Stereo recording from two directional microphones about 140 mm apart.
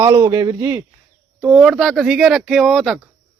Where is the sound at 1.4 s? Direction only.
5° right (ahead or behind).